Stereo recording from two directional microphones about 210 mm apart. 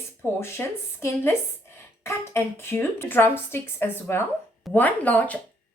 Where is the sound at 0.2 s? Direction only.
10° left (ahead or behind).